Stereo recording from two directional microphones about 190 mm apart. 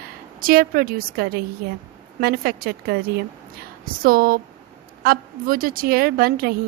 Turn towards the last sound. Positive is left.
turn(degrees=-50)  # may be behind; listen again after turning